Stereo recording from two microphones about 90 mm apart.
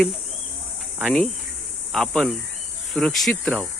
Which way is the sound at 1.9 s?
5° left (ahead or behind).